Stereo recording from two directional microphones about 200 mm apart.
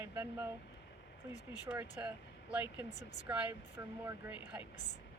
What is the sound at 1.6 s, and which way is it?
Speech, 10° right (ahead or behind).